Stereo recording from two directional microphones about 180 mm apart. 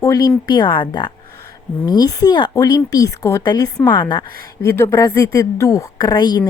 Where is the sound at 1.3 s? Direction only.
60° right (ahead or behind).